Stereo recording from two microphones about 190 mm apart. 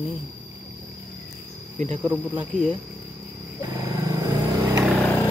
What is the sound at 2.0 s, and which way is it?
Speech, 10° right (ahead or behind).